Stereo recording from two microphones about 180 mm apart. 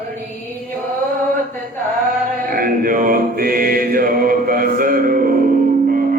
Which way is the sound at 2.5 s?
55° right (ahead or behind).